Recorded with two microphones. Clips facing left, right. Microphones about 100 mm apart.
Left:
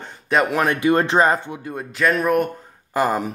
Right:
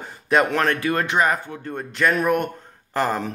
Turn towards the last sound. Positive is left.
turn(degrees=10)  # may be behind; listen again after turning